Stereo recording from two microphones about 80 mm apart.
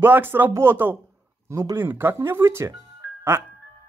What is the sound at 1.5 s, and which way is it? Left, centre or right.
Speech, right.